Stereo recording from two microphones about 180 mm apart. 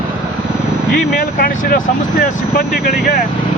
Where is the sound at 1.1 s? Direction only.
55° left (ahead or behind).